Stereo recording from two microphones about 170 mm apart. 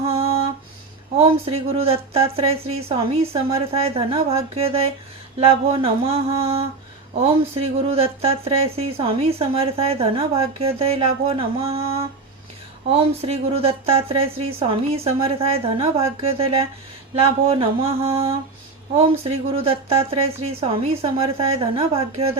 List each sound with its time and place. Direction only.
1.2 s speech: 35° right (ahead or behind)